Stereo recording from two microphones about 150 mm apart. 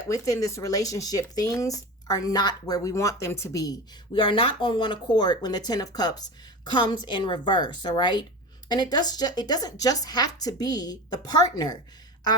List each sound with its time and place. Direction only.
0.0 s a woman's voice: 20° left (ahead or behind)